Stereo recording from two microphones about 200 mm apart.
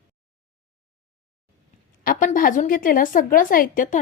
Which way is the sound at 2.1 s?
40° left (ahead or behind).